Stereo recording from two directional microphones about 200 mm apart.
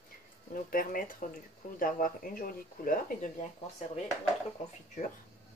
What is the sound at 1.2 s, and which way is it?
Speech, 40° left (ahead or behind).